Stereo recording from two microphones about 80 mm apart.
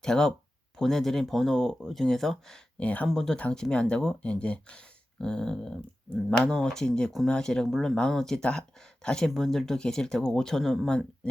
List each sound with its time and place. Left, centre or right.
0.0 s speech: centre
2.7 s speech: centre
3.1 s speech: centre